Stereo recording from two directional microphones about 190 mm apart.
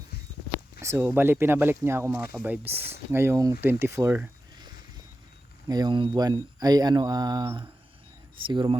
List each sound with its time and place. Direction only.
0.8 s speech: 15° right (ahead or behind)
5.6 s speech: 20° right (ahead or behind)